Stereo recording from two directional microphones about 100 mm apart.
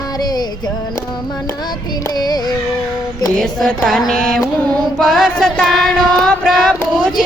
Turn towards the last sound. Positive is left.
turn(degrees=5)  # may be behind; listen again after turning